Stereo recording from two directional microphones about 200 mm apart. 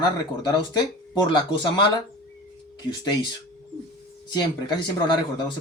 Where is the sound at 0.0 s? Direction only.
20° left (ahead or behind).